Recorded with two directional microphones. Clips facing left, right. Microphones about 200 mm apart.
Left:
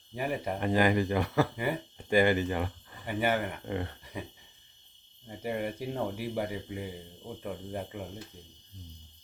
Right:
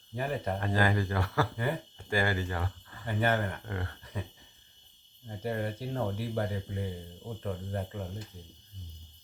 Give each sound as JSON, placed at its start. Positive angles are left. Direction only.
{"t": 0.1, "sound": "speech", "side_deg": 10}
{"t": 5.3, "sound": "speech", "side_deg": 10}